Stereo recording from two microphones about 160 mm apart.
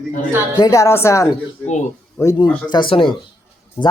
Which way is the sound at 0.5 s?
20° left (ahead or behind).